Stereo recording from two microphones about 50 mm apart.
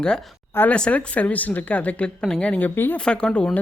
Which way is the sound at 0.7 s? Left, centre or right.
Left.